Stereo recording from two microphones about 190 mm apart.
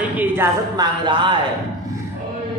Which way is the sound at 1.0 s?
25° right (ahead or behind).